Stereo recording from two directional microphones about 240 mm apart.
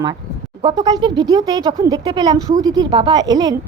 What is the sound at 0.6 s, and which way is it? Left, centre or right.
A woman's voice, centre.